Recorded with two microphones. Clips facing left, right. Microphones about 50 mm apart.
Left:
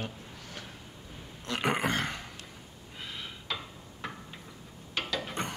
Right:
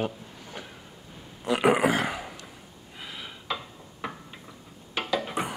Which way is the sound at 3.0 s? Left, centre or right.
Centre.